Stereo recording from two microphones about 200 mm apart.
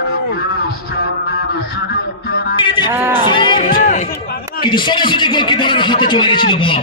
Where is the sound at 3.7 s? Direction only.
40° left (ahead or behind).